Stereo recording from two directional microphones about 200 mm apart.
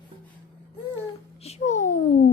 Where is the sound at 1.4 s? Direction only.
35° left (ahead or behind).